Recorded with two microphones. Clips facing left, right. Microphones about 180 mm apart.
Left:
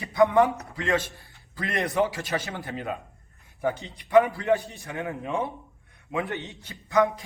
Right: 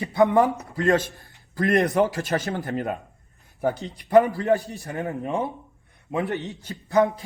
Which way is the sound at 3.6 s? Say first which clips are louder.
Right 3 dB; 40° right (ahead or behind).